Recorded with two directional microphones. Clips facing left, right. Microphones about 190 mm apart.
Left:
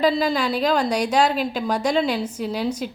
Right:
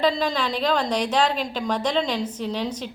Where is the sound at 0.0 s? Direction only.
5° left (ahead or behind).